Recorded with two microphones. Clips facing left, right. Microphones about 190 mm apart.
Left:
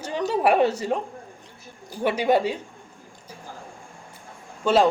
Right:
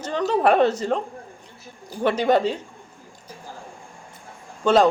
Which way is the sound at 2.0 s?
10° left (ahead or behind).